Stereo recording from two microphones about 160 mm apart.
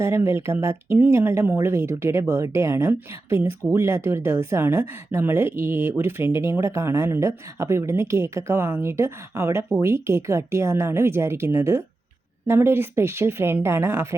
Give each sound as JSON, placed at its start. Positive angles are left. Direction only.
{"t": 0.0, "sound": "speech", "side_deg": -15}